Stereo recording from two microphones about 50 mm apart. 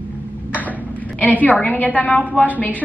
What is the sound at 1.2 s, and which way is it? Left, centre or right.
A woman's voice, left.